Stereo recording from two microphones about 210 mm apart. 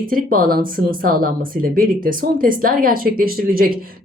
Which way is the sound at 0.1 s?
45° right (ahead or behind).